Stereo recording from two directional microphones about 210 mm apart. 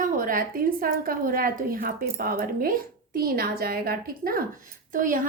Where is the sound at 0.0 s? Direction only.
40° right (ahead or behind).